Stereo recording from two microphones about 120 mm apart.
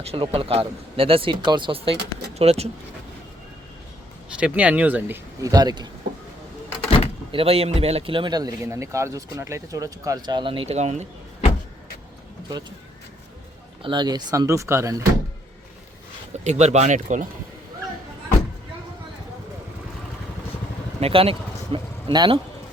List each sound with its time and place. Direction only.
0.0 s speech: 55° right (ahead or behind)
4.4 s speech: 10° right (ahead or behind)
5.4 s speech: 35° right (ahead or behind)
7.3 s speech: 55° right (ahead or behind)
10.7 s speech: 70° right (ahead or behind)
13.8 s speech: 40° right (ahead or behind)
16.4 s speech: 70° right (ahead or behind); by 17.2 s 90° right
21.0 s speech: 50° right (ahead or behind)